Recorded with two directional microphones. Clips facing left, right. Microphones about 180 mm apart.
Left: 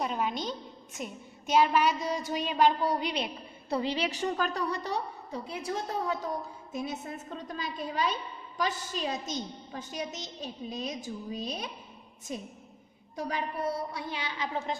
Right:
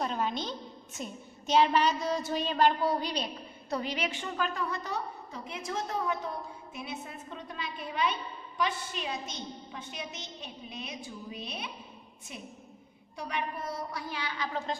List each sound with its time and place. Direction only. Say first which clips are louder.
0.0 s a woman's voice: left 1 dB; 10° left (ahead or behind)